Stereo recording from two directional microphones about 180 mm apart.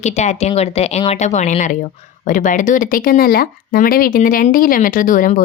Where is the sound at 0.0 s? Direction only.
40° left (ahead or behind).